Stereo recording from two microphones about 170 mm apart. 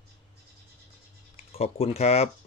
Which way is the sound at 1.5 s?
35° left (ahead or behind).